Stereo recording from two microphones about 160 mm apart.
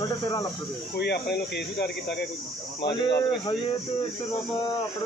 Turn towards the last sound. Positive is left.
turn(degrees=30)  # may be behind; listen again after turning